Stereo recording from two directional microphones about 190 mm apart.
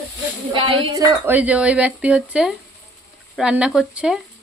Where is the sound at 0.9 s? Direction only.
15° right (ahead or behind).